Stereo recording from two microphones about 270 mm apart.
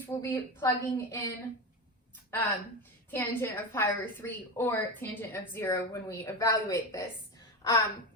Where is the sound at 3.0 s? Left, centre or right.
Centre.